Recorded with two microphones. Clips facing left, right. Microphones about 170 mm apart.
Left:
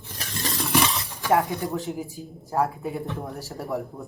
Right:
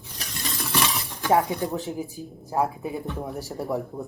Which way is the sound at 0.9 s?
20° right (ahead or behind).